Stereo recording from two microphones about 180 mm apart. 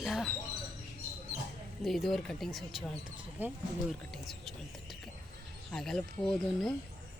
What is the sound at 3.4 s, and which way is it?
Speech, 10° right (ahead or behind).